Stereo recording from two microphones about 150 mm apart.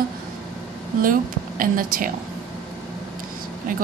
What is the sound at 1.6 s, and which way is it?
Speech, 70° right (ahead or behind).